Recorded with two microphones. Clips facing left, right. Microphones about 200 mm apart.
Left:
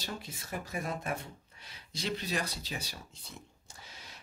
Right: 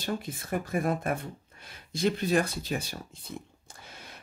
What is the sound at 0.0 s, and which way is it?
Speech, 55° right (ahead or behind).